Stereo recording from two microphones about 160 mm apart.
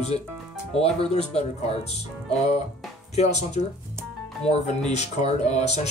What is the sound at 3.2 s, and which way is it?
Speech, 45° left (ahead or behind).